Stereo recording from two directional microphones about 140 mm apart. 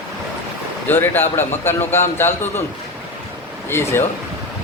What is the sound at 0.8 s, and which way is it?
A man's voice, 15° left (ahead or behind).